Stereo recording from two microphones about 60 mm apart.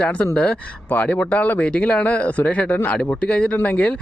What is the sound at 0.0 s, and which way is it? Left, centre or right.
Speech, centre.